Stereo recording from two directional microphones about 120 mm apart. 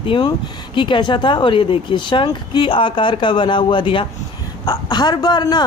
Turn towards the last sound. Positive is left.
turn(degrees=35)  # may be behind; listen again after turning